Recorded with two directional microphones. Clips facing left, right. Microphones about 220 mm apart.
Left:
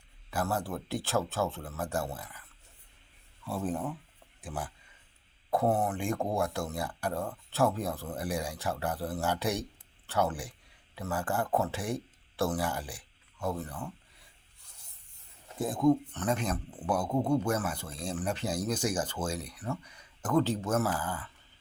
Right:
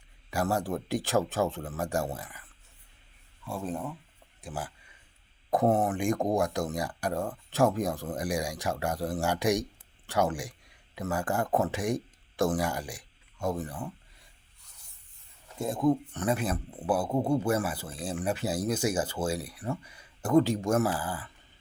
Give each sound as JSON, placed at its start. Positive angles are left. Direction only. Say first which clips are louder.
{"t": 0.3, "sound": "speech", "louder": "right 3 dB", "side_deg": -15}
{"t": 3.4, "sound": "speech", "louder": "left 1 dB", "side_deg": 0}
{"t": 5.8, "sound": "speech", "louder": "right 4 dB", "side_deg": -15}
{"t": 15.5, "sound": "speech", "louder": "even", "side_deg": 0}
{"t": 16.1, "sound": "speech", "louder": "right 2 dB", "side_deg": -10}